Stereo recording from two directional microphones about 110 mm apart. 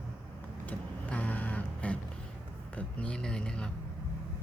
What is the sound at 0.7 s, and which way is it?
Vehicle, 15° left (ahead or behind).